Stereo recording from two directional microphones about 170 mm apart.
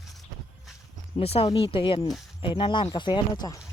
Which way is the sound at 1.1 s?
35° left (ahead or behind).